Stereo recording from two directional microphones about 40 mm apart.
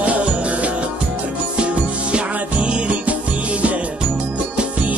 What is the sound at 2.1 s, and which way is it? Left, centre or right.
Music, right.